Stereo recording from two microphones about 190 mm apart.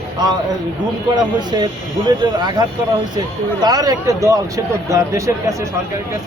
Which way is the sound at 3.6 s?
20° right (ahead or behind).